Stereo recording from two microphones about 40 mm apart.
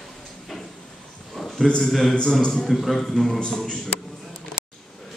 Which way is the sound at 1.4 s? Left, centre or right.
Centre.